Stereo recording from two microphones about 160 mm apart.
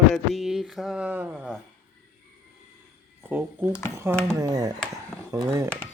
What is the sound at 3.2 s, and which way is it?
Speech, 10° right (ahead or behind).